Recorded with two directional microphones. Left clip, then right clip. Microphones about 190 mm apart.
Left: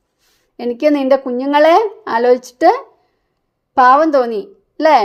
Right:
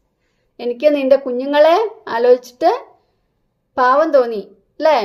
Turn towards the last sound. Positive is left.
turn(degrees=40)  # may be behind; listen again after turning